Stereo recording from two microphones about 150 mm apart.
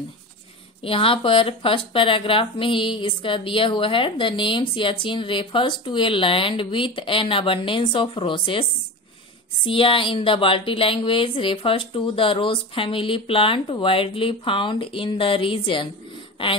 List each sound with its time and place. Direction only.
0.8 s speech: 40° left (ahead or behind)
9.7 s speech: 35° left (ahead or behind)